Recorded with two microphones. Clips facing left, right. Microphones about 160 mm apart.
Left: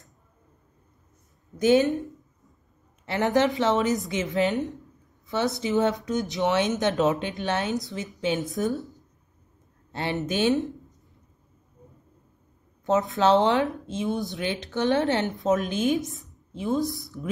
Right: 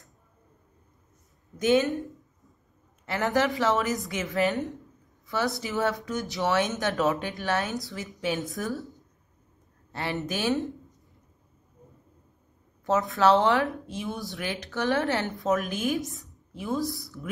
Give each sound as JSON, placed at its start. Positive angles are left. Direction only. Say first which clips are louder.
{"t": 1.9, "sound": "speech", "louder": "left 3 dB", "side_deg": 0}
{"t": 3.1, "sound": "speech", "louder": "left 3 dB", "side_deg": 25}
{"t": 9.9, "sound": "speech", "louder": "left 4 dB", "side_deg": 25}
{"t": 12.8, "sound": "speech", "louder": "left 1 dB", "side_deg": 20}
{"t": 16.0, "sound": "speech", "louder": "left 1 dB", "side_deg": 0}
{"t": 16.5, "sound": "speech", "louder": "left 3 dB", "side_deg": 20}